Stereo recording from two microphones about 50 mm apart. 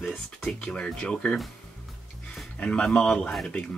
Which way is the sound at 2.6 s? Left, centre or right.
Centre.